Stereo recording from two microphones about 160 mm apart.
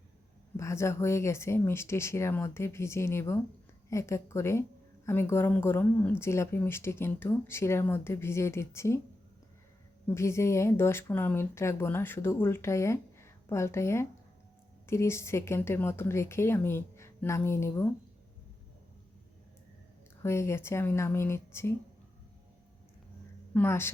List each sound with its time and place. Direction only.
0.5 s speech: 15° left (ahead or behind)
10.2 s speech: 15° left (ahead or behind)
20.2 s speech: 15° left (ahead or behind)
23.6 s speech: 15° left (ahead or behind)